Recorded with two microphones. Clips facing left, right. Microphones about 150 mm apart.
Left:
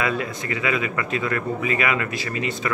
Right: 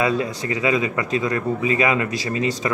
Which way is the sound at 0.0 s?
25° right (ahead or behind).